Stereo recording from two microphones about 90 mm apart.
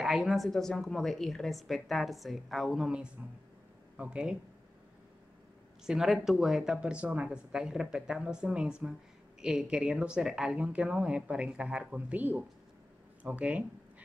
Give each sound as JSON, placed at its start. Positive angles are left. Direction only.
{"t": 0.0, "sound": "a woman's voice", "side_deg": -5}
{"t": 5.9, "sound": "a woman's voice", "side_deg": -5}